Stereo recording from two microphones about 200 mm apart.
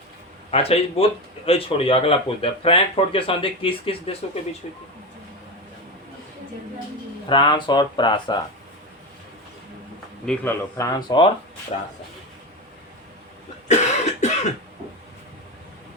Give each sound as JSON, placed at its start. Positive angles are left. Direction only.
{"t": 0.5, "sound": "speech", "side_deg": 30}
{"t": 7.3, "sound": "speech", "side_deg": 25}
{"t": 10.2, "sound": "speech", "side_deg": 10}
{"t": 11.7, "sound": "speech", "side_deg": 35}
{"t": 13.7, "sound": "cough", "side_deg": 35}